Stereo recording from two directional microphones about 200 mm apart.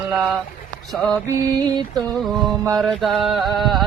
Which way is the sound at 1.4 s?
20° right (ahead or behind).